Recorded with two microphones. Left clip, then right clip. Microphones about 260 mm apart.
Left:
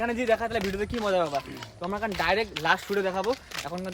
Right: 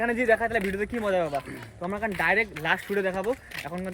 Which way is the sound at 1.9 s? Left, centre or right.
Centre.